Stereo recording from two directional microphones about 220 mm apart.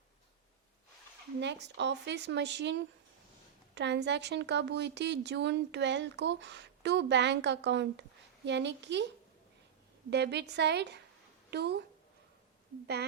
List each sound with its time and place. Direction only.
1.4 s a woman's voice: 50° right (ahead or behind)
10.1 s a woman's voice: 50° right (ahead or behind)